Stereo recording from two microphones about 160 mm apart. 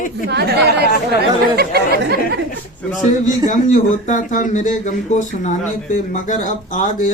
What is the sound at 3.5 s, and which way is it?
Speech, 55° left (ahead or behind).